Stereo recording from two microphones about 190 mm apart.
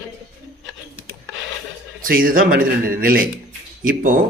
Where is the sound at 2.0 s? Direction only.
50° right (ahead or behind).